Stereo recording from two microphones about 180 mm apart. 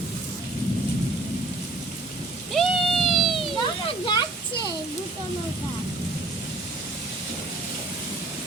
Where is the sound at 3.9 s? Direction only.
25° left (ahead or behind).